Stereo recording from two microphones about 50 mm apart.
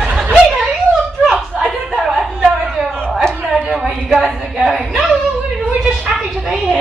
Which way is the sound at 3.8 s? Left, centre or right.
Centre.